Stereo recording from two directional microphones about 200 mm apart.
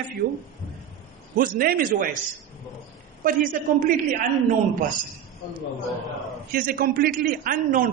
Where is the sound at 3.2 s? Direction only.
45° right (ahead or behind).